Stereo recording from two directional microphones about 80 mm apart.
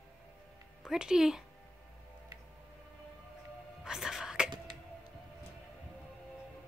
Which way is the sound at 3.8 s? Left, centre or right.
Centre.